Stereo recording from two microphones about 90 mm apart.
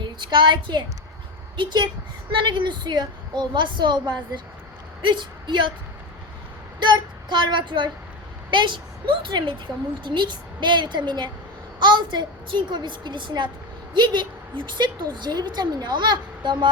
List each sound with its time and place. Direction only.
0.0 s a child's voice: 60° right (ahead or behind)
6.7 s a woman's voice: 60° right (ahead or behind)